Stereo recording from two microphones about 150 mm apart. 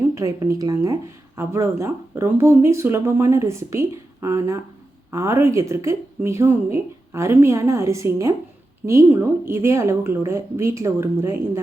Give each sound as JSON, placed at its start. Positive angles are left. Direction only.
{"t": 0.1, "sound": "speech", "side_deg": -20}